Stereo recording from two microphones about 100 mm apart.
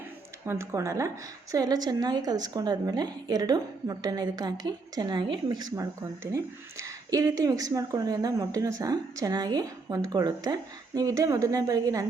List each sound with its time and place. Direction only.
0.4 s a woman's voice: 30° right (ahead or behind)